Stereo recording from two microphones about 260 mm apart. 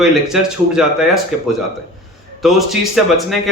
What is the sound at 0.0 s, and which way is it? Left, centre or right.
A man's voice, centre.